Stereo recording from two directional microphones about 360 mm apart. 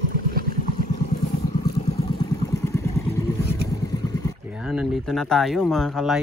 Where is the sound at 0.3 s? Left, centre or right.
Right.